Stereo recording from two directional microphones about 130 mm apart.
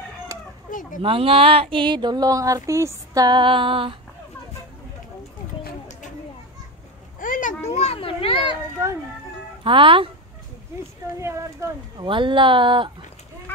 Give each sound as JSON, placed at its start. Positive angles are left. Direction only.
{"t": 0.3, "sound": "chicken", "side_deg": -25}
{"t": 0.7, "sound": "speech", "side_deg": 90}
{"t": 1.0, "sound": "speech", "side_deg": -45}
{"t": 3.3, "sound": "speech", "side_deg": -35}
{"t": 7.2, "sound": "a sound", "side_deg": 90}
{"t": 7.6, "sound": "children playing", "side_deg": 55}
{"t": 8.8, "sound": "music", "side_deg": -20}
{"t": 9.6, "sound": "speech", "side_deg": -40}
{"t": 11.1, "sound": "speech", "side_deg": -20}
{"t": 12.1, "sound": "speech", "side_deg": -40}